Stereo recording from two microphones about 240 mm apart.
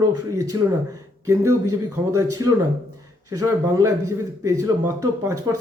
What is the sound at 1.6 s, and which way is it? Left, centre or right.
Speech, right.